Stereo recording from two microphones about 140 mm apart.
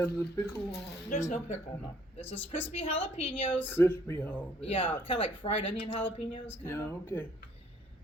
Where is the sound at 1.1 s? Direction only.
55° left (ahead or behind).